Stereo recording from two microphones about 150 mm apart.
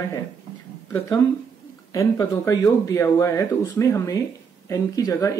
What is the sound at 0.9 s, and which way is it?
Speech, 20° left (ahead or behind).